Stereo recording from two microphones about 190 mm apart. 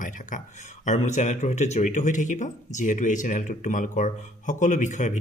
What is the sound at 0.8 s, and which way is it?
Speech, 40° left (ahead or behind).